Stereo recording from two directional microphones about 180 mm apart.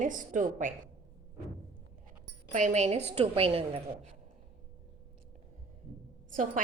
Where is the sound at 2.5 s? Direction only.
40° right (ahead or behind).